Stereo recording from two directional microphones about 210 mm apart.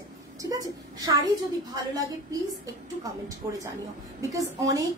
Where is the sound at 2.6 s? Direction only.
15° right (ahead or behind).